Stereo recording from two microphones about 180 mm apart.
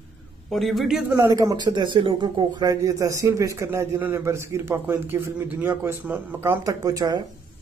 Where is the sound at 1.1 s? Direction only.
15° right (ahead or behind).